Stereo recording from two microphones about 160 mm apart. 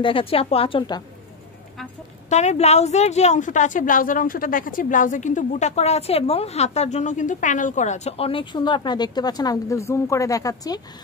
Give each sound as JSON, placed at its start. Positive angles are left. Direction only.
{"t": 0.0, "sound": "a woman's voice", "side_deg": 35}
{"t": 2.2, "sound": "a woman's voice", "side_deg": 45}